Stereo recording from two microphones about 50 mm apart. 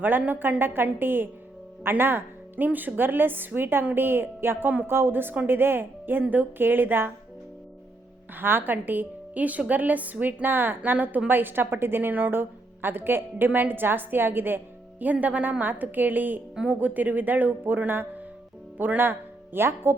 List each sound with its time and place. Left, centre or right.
0.0 s a woman's voice: right
2.6 s a woman's voice: right
4.9 s a woman's voice: right
8.4 s a woman's voice: right
19.5 s a woman's voice: right